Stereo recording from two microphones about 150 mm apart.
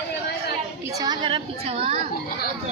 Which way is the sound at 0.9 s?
25° right (ahead or behind).